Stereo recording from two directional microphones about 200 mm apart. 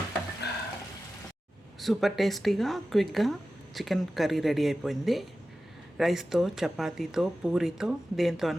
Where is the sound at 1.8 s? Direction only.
Centre (ahead or behind).